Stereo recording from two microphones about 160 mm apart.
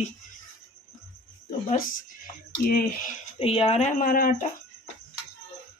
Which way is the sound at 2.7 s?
70° left (ahead or behind).